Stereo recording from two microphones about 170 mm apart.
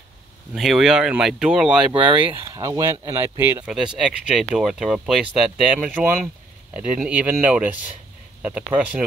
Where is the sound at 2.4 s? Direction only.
20° right (ahead or behind).